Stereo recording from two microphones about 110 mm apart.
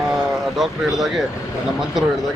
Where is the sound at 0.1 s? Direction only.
Centre (ahead or behind).